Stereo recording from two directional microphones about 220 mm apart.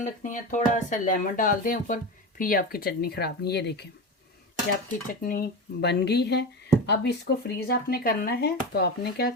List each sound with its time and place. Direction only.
0.0 s speech: 35° left (ahead or behind)
5.2 s speech: 40° left (ahead or behind)